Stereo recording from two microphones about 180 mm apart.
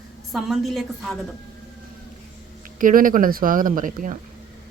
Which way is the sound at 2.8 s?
50° right (ahead or behind).